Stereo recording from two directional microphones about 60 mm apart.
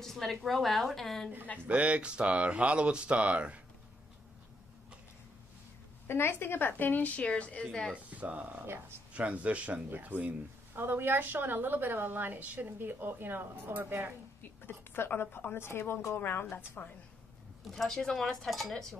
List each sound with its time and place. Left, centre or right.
0.0 s a woman's voice: centre
1.7 s speech: right
6.0 s a woman's voice: left
7.9 s speech: right
8.6 s a woman's voice: right
9.1 s a woman's voice: right
14.6 s a woman's voice: left
17.6 s speech: centre